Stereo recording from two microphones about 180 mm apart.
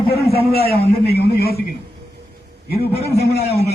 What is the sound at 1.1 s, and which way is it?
Speech, 60° left (ahead or behind).